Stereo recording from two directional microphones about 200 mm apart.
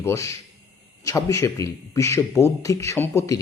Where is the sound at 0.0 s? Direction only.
15° left (ahead or behind).